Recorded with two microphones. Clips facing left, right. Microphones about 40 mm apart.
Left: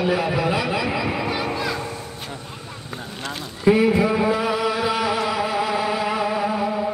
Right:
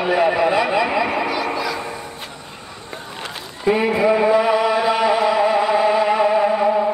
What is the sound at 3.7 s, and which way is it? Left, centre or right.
Chant, centre.